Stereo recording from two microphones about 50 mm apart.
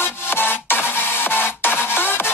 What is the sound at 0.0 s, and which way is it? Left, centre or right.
Music, left.